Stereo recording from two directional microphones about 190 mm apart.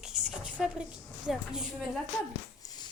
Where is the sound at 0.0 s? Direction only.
5° right (ahead or behind).